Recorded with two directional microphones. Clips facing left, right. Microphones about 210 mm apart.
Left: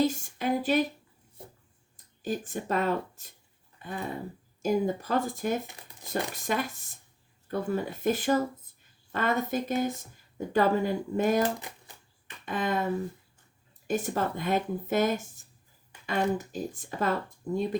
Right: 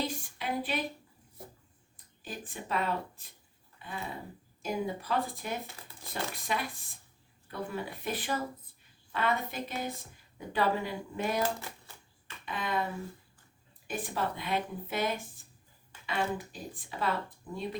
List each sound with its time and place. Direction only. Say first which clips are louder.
0.0 s speech: left 8 dB; 45° left (ahead or behind)
2.2 s a woman's voice: left 10 dB; 45° left (ahead or behind)
12.5 s a woman's voice: left 5 dB; 45° left (ahead or behind)
13.8 s a woman's voice: left 6 dB; 45° left (ahead or behind)